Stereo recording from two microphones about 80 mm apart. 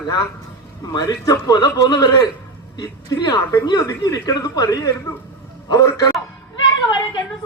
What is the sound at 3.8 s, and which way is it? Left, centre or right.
A man's voice, left.